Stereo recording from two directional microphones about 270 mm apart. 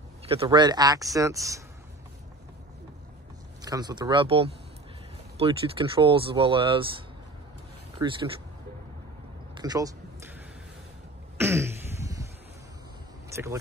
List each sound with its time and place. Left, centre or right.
0.3 s speech: centre
3.6 s speech: centre
8.0 s speech: centre
9.6 s a sound: centre
11.3 s throat clearing: centre